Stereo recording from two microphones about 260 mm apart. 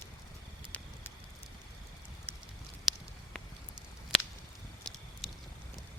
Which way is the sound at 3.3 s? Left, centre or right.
Centre.